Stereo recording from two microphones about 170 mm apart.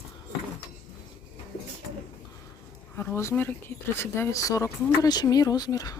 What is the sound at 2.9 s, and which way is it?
Speech, 15° left (ahead or behind).